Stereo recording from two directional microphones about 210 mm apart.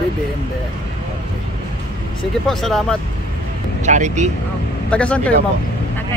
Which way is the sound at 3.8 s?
35° right (ahead or behind).